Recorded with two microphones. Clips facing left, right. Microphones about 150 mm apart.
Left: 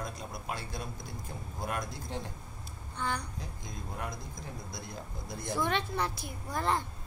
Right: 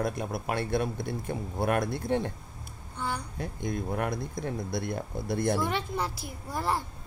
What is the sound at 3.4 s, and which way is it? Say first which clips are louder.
Speech: right 11 dB; 65° right (ahead or behind).